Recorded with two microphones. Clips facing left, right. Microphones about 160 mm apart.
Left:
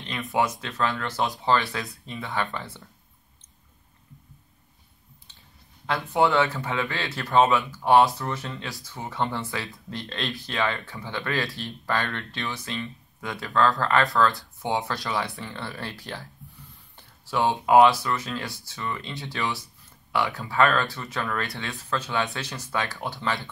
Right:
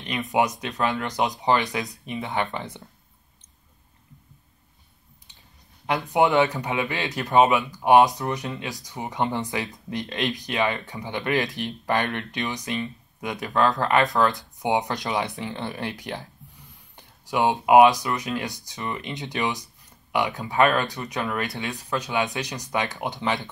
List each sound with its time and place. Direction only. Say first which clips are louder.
0.0 s speech: right 2 dB; 15° right (ahead or behind)
5.9 s speech: right 2 dB; 15° right (ahead or behind)